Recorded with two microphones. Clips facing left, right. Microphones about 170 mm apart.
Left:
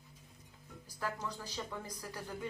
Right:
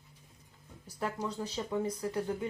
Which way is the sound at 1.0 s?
20° right (ahead or behind).